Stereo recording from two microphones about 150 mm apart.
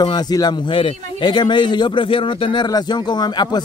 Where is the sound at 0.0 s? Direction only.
25° left (ahead or behind).